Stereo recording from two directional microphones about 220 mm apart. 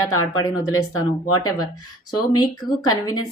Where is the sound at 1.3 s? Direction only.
15° left (ahead or behind).